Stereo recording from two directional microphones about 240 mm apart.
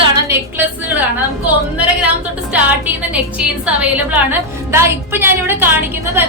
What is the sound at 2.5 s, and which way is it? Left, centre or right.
A woman's voice, centre.